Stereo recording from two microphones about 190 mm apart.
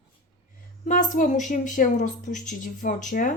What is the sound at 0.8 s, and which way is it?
A woman's voice, 40° left (ahead or behind).